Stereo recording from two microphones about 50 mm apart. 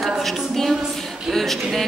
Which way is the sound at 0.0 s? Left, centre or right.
Centre.